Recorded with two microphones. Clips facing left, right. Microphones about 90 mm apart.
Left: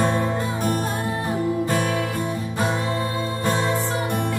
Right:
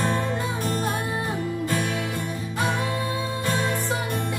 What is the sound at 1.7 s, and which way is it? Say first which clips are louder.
Music: left 4 dB; 30° left (ahead or behind).